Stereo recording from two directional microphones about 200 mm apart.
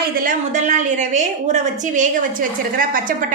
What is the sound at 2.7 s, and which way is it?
Speech, 45° right (ahead or behind).